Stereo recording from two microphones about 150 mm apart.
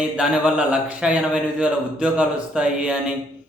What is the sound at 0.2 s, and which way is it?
Speech, 5° right (ahead or behind).